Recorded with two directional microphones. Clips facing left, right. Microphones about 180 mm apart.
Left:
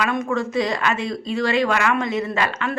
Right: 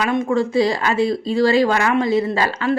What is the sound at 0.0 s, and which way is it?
Speech, 25° right (ahead or behind).